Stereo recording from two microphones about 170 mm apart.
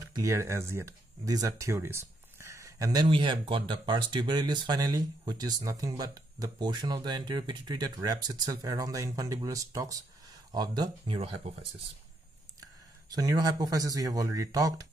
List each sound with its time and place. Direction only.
0.1 s speech: 20° right (ahead or behind); by 11.5 s 35° right (ahead or behind)
13.1 s speech: 20° right (ahead or behind)